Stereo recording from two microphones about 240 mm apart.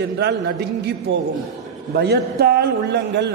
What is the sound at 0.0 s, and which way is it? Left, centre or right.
A man's voice, right.